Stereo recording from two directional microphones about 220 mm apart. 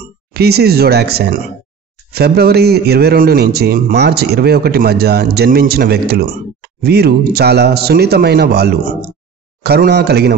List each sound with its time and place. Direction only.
0.3 s a man's voice: 45° right (ahead or behind)